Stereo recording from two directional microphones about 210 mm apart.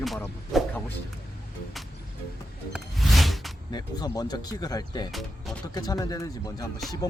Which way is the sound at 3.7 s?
20° left (ahead or behind).